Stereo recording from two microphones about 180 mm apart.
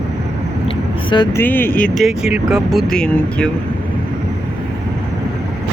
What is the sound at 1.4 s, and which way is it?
Speech, 10° left (ahead or behind).